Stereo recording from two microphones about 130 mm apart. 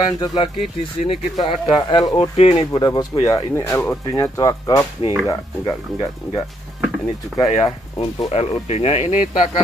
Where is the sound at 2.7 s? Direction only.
30° left (ahead or behind).